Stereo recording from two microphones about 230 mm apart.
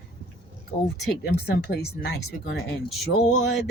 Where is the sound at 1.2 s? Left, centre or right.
Left.